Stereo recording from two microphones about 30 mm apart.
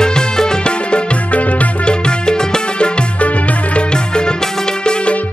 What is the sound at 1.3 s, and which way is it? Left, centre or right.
Music, left.